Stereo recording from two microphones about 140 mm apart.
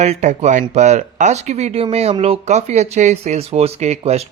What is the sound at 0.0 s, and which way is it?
Speech, 55° right (ahead or behind).